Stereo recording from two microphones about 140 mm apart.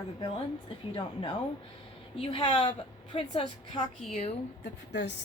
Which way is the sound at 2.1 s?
45° left (ahead or behind).